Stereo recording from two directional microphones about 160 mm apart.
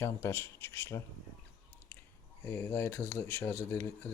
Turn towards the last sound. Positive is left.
turn(degrees=15)  # may be behind; listen again after turning